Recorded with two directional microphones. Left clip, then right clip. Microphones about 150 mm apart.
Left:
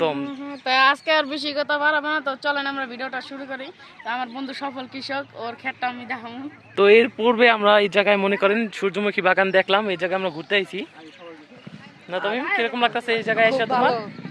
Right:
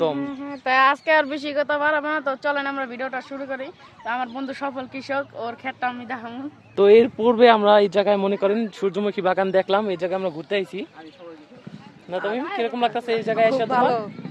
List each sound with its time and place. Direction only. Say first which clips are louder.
0.0 s speech: even; 15° right (ahead or behind)
1.1 s speech: right 2 dB; centre (ahead or behind)
1.4 s speech: right 1 dB; 35° right (ahead or behind)
1.6 s speech: left 1 dB; centre (ahead or behind)
12.1 s speech: left 2 dB; centre (ahead or behind)